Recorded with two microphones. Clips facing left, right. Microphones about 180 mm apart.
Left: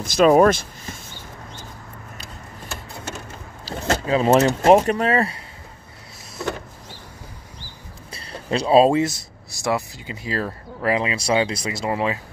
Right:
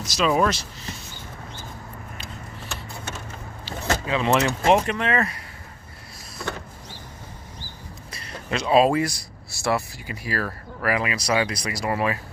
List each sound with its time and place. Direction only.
0.0 s speech: 50° left (ahead or behind)
3.6 s speech: 35° left (ahead or behind)
8.1 s speech: 30° left (ahead or behind)